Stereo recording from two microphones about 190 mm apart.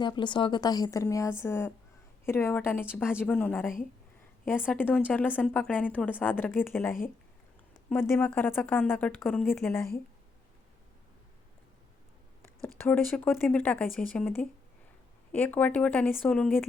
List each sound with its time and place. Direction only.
0.0 s a woman's voice: 25° left (ahead or behind)
7.9 s a woman's voice: 10° left (ahead or behind)
12.6 s a woman's voice: 10° left (ahead or behind)